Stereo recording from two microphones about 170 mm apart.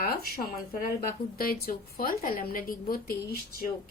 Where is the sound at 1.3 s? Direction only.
60° left (ahead or behind).